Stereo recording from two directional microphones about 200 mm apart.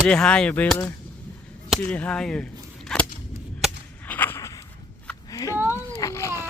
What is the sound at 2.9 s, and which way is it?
Cap gun, 5° left (ahead or behind).